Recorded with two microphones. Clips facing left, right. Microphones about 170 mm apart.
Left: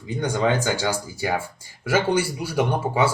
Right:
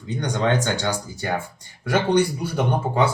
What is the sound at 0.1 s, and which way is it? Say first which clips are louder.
Speech: even; 5° left (ahead or behind).